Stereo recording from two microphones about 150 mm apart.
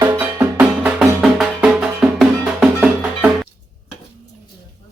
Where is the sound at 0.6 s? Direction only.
5° right (ahead or behind).